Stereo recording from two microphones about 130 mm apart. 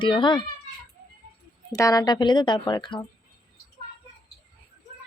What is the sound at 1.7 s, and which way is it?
Speech, 25° left (ahead or behind).